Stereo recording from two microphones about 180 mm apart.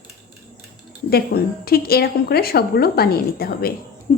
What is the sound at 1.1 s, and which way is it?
A woman's voice, 60° left (ahead or behind).